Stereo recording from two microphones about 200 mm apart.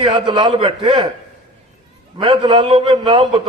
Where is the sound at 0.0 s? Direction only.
25° right (ahead or behind).